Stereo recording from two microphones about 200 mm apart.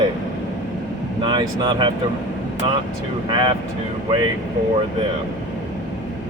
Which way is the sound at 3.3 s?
25° right (ahead or behind).